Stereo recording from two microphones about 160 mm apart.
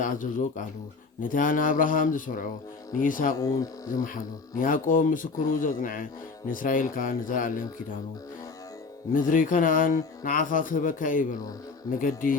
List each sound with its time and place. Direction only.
0.0 s speech: 55° left (ahead or behind)
9.1 s speech: 55° left (ahead or behind)